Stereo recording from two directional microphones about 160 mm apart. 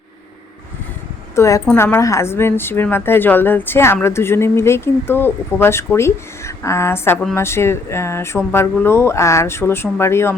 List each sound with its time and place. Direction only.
1.4 s a woman's voice: 20° left (ahead or behind)